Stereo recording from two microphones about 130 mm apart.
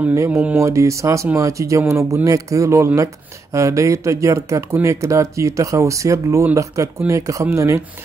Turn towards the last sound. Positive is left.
turn(degrees=-20)  # may be behind; listen again after turning